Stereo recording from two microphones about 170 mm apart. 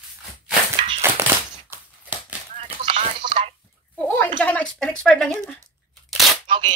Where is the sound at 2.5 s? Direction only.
30° right (ahead or behind).